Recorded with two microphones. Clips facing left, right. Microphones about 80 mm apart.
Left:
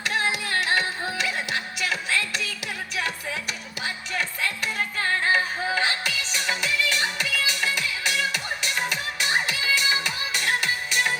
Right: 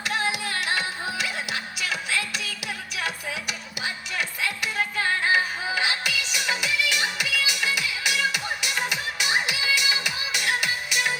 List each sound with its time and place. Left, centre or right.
0.0 s music: left